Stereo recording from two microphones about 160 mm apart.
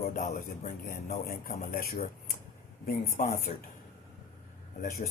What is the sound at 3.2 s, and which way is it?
Speech, 50° left (ahead or behind).